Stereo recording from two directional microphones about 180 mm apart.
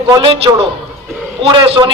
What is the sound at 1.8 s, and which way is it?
Speech, 25° right (ahead or behind).